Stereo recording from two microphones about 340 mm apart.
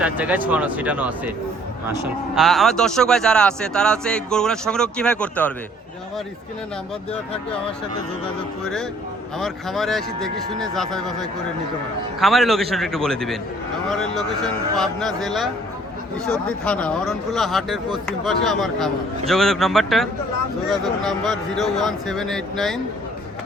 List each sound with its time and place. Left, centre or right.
0.0 s speech: centre
9.4 s speech: centre
12.2 s speech: centre